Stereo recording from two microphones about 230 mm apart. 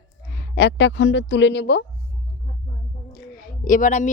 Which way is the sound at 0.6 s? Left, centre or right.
Left.